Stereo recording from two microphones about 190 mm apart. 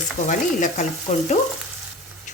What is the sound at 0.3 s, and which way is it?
Speech, 40° left (ahead or behind).